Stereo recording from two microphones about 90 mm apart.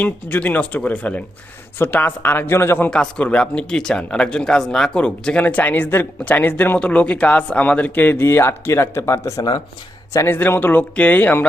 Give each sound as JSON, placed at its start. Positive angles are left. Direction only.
{"t": 0.0, "sound": "speech", "side_deg": 15}
{"t": 2.9, "sound": "speech", "side_deg": 10}